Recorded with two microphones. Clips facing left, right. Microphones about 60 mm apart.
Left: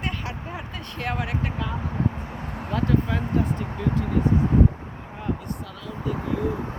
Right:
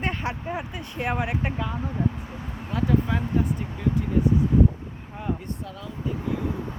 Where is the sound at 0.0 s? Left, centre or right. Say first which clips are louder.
Right 3 dB; right.